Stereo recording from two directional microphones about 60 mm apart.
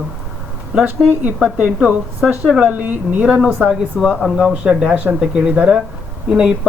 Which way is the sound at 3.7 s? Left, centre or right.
Centre.